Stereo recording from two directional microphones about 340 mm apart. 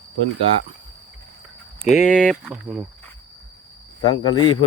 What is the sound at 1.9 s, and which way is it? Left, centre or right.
Speech, centre.